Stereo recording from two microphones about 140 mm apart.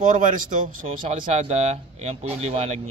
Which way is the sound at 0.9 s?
45° right (ahead or behind).